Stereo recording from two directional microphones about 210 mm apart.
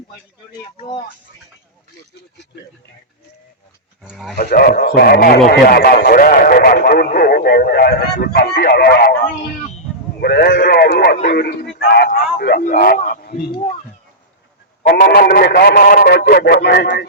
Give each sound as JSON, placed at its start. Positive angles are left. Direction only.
{"t": 0.8, "sound": "speech", "side_deg": 20}
{"t": 4.0, "sound": "speech", "side_deg": 0}
{"t": 4.4, "sound": "a man's voice", "side_deg": 45}
{"t": 13.5, "sound": "speech", "side_deg": 30}
{"t": 14.8, "sound": "speech", "side_deg": 50}